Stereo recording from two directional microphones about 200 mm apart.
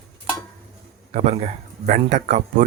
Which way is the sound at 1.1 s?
35° right (ahead or behind).